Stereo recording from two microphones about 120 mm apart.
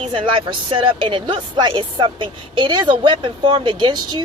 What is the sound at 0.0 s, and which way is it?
Speech, 45° right (ahead or behind).